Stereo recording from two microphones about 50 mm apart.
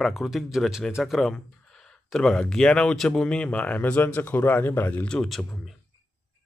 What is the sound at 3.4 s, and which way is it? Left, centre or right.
Speech, left.